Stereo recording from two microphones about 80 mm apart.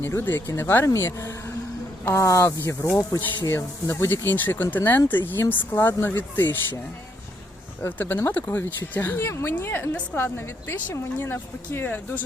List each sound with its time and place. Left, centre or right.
0.0 s a woman's voice: left
7.8 s a woman's voice: left